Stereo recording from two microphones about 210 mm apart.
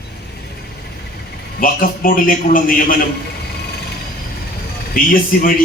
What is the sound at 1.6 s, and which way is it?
A man's voice, 40° left (ahead or behind).